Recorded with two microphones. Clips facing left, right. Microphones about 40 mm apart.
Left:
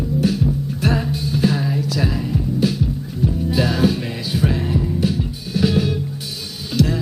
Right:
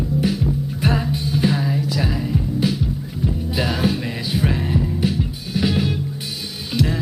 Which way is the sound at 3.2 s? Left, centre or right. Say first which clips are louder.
Left 3 dB; centre.